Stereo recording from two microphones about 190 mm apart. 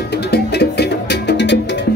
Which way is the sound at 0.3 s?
60° left (ahead or behind).